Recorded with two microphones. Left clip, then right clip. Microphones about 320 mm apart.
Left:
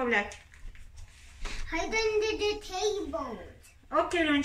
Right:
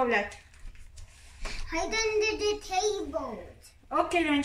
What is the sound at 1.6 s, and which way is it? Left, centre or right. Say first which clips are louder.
A child's voice: even; centre.